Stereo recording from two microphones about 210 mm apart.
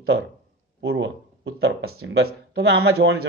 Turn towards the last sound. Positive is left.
turn(degrees=-50)  # may be behind; listen again after turning